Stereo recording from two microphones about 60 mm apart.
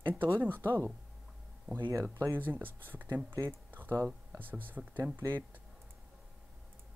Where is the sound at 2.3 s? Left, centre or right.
Right.